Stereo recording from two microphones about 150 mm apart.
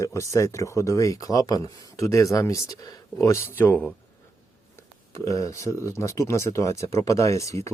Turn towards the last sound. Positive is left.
turn(degrees=20)  # may be behind; listen again after turning